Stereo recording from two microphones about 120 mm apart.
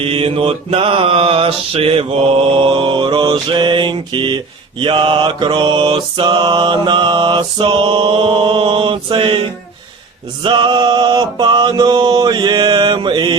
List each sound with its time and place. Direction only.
0.0 s mantra: 50° right (ahead or behind)